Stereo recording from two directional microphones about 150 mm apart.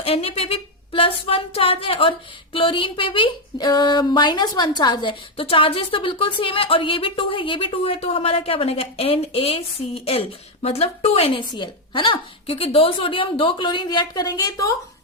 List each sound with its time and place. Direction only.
0.0 s speech: 40° left (ahead or behind); by 14.7 s 25° left (ahead or behind)